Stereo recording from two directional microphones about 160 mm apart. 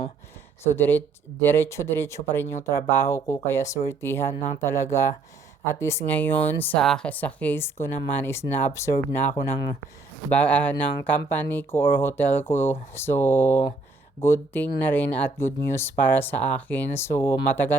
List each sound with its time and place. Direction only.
0.6 s speech: 15° left (ahead or behind)